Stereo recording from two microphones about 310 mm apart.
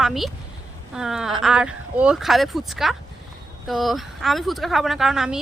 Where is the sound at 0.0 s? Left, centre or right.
Centre.